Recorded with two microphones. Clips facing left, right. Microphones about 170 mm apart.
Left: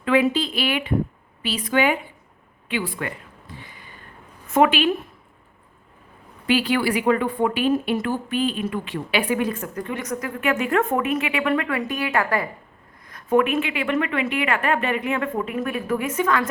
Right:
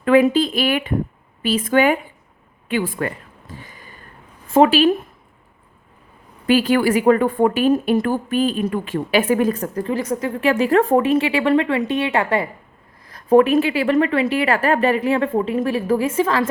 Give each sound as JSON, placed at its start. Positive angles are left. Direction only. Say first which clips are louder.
{"t": 0.0, "sound": "a woman's voice", "louder": "right 5 dB", "side_deg": -45}
{"t": 3.5, "sound": "a sound", "louder": "right 3 dB", "side_deg": -45}
{"t": 4.4, "sound": "speech", "louder": "right 5 dB", "side_deg": -30}
{"t": 6.5, "sound": "speech", "louder": "right 5 dB", "side_deg": -45}